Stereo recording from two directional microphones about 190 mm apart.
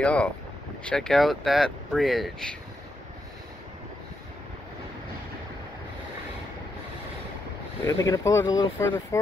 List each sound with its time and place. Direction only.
0.0 s speech: 5° left (ahead or behind)
7.8 s speech: 15° left (ahead or behind)